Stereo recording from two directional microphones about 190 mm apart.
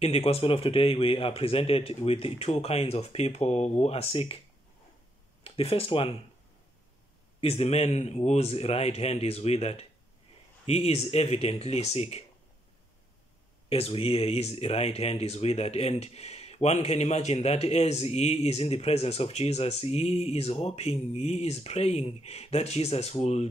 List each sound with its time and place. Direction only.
0.0 s speech: 30° left (ahead or behind)
5.4 s speech: 30° left (ahead or behind)
7.3 s speech: 30° left (ahead or behind)
13.7 s speech: 30° left (ahead or behind)